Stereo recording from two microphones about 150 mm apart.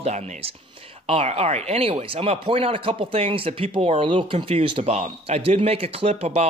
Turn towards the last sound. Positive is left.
turn(degrees=-45)  # may be behind; listen again after turning